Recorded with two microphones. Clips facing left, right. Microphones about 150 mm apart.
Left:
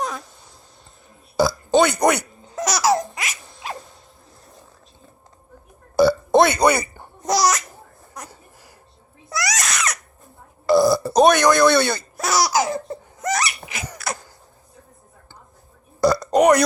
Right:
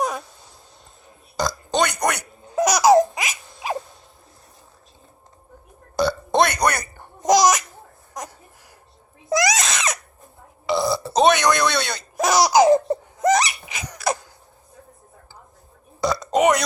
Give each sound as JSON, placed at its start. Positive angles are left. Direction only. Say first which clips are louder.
{"t": 1.4, "sound": "burping", "louder": "left 5 dB", "side_deg": 5}
{"t": 2.6, "sound": "laughter", "louder": "right 5 dB", "side_deg": -15}
{"t": 6.0, "sound": "burping", "louder": "left 4 dB", "side_deg": 5}
{"t": 7.2, "sound": "speech", "louder": "right 3 dB", "side_deg": -20}
{"t": 9.5, "sound": "baby cry", "louder": "right 2 dB", "side_deg": -20}
{"t": 10.7, "sound": "burping", "louder": "left 6 dB", "side_deg": 0}
{"t": 12.1, "sound": "laughter", "louder": "right 6 dB", "side_deg": -15}
{"t": 16.0, "sound": "burping", "louder": "left 3 dB", "side_deg": 0}